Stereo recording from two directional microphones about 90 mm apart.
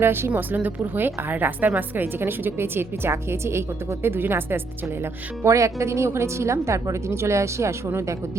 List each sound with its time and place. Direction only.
0.0 s a woman's voice: 25° right (ahead or behind)
5.4 s speech: 35° right (ahead or behind)